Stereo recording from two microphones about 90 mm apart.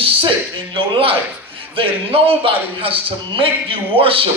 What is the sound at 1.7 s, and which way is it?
A man's voice, 85° right.